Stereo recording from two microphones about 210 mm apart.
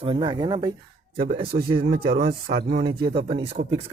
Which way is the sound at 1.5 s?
45° right (ahead or behind).